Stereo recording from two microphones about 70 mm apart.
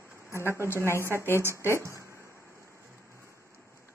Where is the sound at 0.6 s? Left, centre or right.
Left.